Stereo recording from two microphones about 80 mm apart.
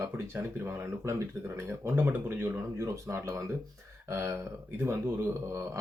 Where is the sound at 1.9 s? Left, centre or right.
Right.